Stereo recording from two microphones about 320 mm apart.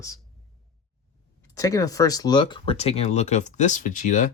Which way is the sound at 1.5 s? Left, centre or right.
Centre.